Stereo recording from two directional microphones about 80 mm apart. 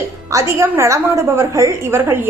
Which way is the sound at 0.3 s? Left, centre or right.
Right.